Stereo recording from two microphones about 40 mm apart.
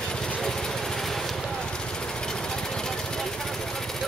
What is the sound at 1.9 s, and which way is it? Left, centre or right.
Vehicle, centre.